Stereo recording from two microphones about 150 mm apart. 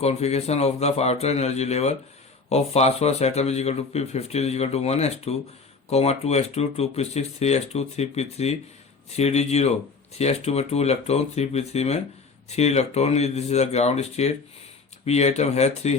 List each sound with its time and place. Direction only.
0.0 s speech: 45° left (ahead or behind)